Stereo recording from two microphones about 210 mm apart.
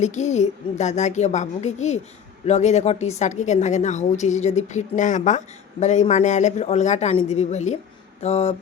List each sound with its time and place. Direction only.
0.0 s a woman's voice: 35° left (ahead or behind)